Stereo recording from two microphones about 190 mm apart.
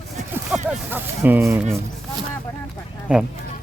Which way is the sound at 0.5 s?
5° right (ahead or behind).